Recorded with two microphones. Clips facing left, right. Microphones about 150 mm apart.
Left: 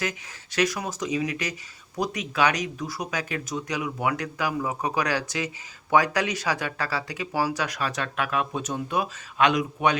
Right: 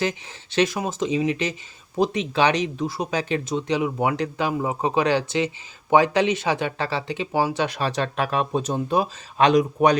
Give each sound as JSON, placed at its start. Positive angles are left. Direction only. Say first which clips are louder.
{"t": 0.0, "sound": "speech", "louder": "right 6 dB", "side_deg": -25}